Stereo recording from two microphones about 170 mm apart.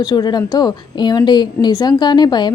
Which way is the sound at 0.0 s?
25° left (ahead or behind).